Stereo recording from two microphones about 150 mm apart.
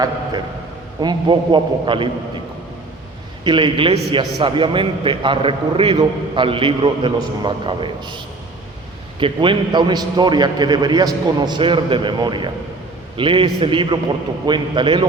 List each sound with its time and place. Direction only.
1.0 s a man's voice: 30° right (ahead or behind)
3.4 s a man's voice: 35° right (ahead or behind)
9.2 s a man's voice: 35° right (ahead or behind)